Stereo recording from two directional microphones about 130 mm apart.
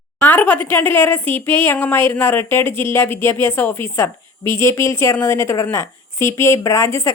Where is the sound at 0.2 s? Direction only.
15° left (ahead or behind).